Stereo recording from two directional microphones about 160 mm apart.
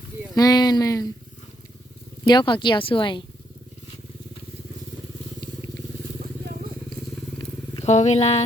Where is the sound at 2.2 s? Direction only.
25° left (ahead or behind).